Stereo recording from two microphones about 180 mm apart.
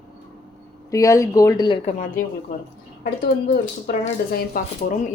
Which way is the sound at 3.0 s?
60° left (ahead or behind).